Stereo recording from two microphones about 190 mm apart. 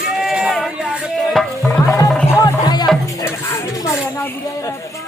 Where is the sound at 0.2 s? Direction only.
Centre (ahead or behind).